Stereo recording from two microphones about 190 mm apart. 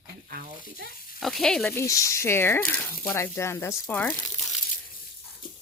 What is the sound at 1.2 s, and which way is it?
Speech, centre (ahead or behind).